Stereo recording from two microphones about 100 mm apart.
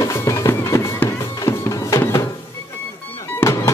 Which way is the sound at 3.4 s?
20° left (ahead or behind).